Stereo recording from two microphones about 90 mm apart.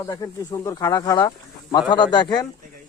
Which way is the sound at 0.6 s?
40° left (ahead or behind).